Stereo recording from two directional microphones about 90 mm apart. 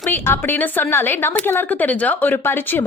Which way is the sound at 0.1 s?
20° left (ahead or behind).